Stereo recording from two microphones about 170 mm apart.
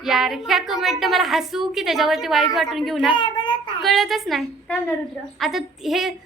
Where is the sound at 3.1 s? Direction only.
25° left (ahead or behind).